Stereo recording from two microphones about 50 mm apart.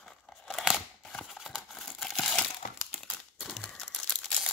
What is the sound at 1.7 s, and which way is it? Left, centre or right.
Crumpling, centre.